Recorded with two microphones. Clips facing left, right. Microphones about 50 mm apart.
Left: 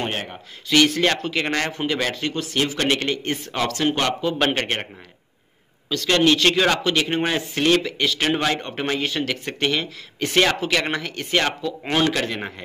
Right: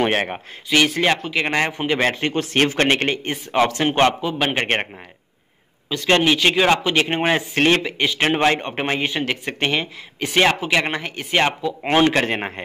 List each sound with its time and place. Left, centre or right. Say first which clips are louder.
0.0 s speech: right 8 dB; right
0.9 s speech: right 2 dB; centre
2.0 s speech: right 4 dB; right
3.3 s speech: right 5 dB; right
4.3 s speech: left 1 dB; centre
5.9 s speech: right 1 dB; right
10.2 s speech: right 1 dB; centre; by 12.6 s right